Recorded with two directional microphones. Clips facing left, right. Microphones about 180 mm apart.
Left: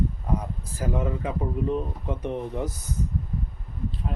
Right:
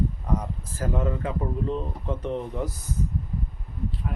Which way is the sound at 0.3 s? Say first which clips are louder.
Even; 15° left (ahead or behind).